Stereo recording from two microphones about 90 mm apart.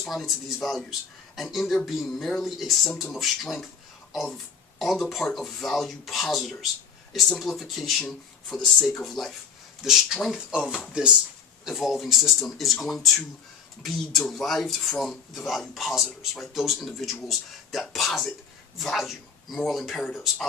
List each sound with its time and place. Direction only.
0.1 s speech: centre (ahead or behind)